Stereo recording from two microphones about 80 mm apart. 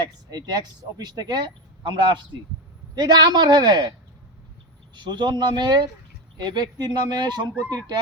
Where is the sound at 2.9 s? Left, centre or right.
Right.